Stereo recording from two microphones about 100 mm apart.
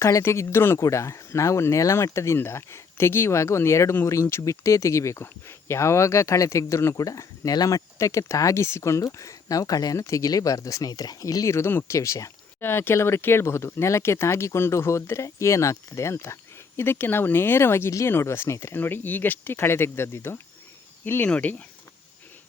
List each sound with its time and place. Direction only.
0.0 s speech: 30° left (ahead or behind); by 21.5 s 15° left (ahead or behind)